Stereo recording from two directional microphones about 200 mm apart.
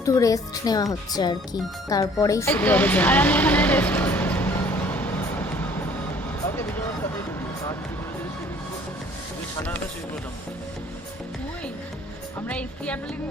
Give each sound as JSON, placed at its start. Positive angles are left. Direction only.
{"t": 0.0, "sound": "a woman's voice", "side_deg": 15}
{"t": 2.2, "sound": "vehicle", "side_deg": 15}
{"t": 12.5, "sound": "a woman's voice", "side_deg": 5}